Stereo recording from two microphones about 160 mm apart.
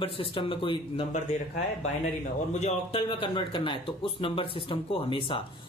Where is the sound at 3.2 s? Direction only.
30° left (ahead or behind).